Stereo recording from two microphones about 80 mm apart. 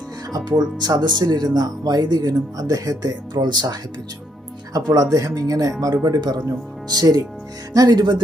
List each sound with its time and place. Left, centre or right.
0.3 s speech: right